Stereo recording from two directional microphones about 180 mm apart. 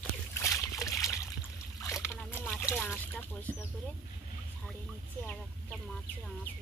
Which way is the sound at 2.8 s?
10° left (ahead or behind).